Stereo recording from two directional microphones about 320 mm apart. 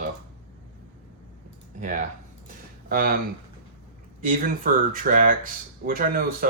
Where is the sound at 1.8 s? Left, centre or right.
Right.